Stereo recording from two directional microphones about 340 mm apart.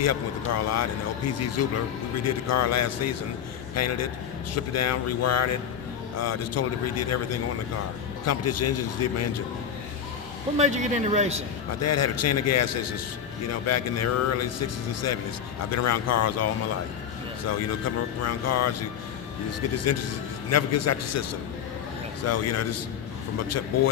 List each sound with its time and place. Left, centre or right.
0.0 s speech: left
10.6 s a man's voice: right
11.8 s speech: left
15.7 s speech: left